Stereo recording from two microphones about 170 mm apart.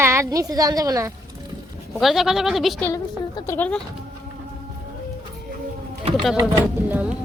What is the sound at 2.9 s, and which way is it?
Speech, 20° left (ahead or behind).